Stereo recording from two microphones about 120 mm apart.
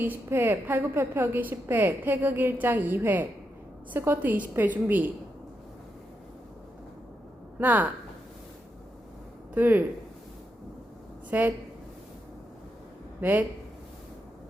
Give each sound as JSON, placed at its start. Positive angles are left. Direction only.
{"t": 0.0, "sound": "a woman's voice", "side_deg": -15}
{"t": 7.6, "sound": "a woman's voice", "side_deg": -15}
{"t": 9.6, "sound": "a woman's voice", "side_deg": -15}
{"t": 11.3, "sound": "speech", "side_deg": -15}